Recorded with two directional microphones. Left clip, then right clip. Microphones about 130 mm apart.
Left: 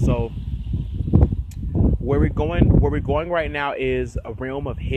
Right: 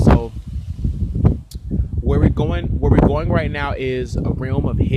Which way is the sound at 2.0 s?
40° right (ahead or behind).